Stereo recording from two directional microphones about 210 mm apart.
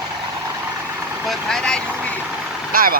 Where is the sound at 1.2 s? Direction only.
Centre (ahead or behind).